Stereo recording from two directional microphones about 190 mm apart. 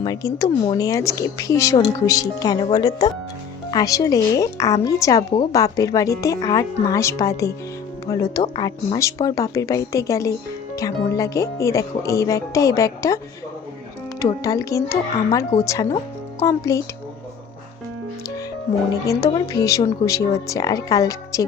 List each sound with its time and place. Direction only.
0.0 s a woman's voice: 20° left (ahead or behind)
14.2 s a woman's voice: 15° left (ahead or behind)
19.0 s a woman's voice: 15° left (ahead or behind)